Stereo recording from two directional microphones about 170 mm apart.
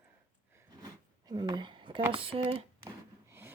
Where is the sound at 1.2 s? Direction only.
25° right (ahead or behind).